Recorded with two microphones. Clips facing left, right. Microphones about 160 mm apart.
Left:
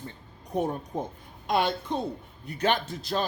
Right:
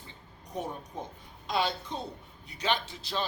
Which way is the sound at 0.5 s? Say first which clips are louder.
Left 8 dB; 55° left (ahead or behind).